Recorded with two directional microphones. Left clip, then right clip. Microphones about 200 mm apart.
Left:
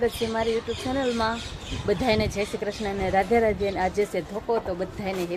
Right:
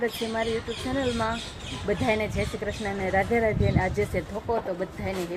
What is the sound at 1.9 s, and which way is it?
Speech, 15° left (ahead or behind).